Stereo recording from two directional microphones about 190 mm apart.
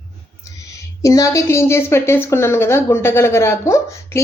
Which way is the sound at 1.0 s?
15° left (ahead or behind).